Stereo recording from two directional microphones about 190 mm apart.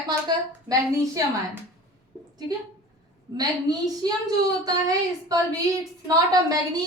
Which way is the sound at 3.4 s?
20° right (ahead or behind).